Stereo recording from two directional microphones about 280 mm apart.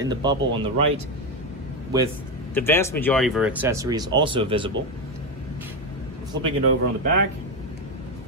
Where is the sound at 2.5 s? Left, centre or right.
Centre.